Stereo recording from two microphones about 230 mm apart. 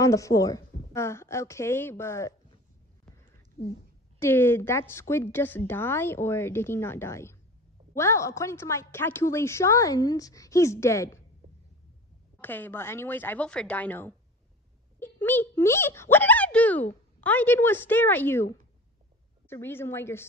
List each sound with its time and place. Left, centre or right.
0.0 s a woman's voice: centre
3.6 s speech: left
4.2 s a woman's voice: centre
12.4 s a woman's voice: centre